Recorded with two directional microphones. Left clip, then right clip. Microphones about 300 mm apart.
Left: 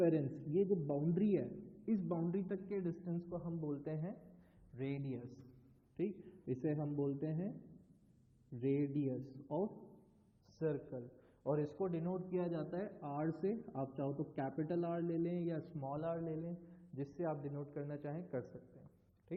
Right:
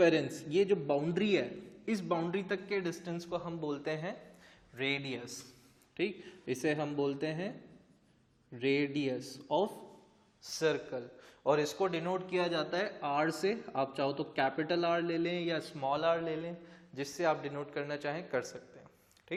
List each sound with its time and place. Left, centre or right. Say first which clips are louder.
0.0 s a man's voice: right 8 dB; centre
8.5 s a man's voice: right 6 dB; centre